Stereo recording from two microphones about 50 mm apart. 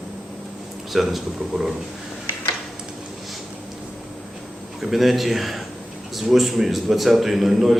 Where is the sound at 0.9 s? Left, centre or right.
Centre.